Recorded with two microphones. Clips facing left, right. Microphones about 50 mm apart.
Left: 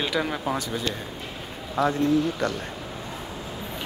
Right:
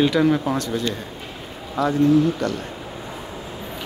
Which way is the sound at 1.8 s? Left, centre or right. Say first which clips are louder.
Right 5 dB; left.